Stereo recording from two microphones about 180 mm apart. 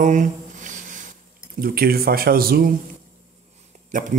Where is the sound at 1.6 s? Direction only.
55° right (ahead or behind).